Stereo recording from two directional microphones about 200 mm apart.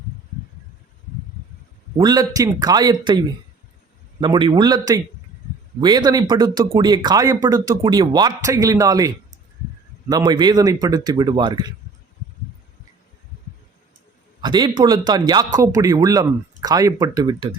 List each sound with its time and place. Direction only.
2.0 s speech: 20° right (ahead or behind)
14.4 s speech: 20° right (ahead or behind)